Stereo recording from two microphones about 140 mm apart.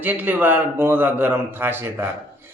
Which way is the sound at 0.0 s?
10° right (ahead or behind).